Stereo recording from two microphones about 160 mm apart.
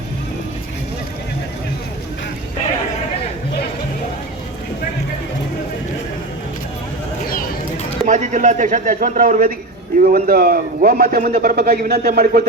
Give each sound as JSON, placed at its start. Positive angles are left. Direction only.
{"t": 8.0, "sound": "a man's voice", "side_deg": -50}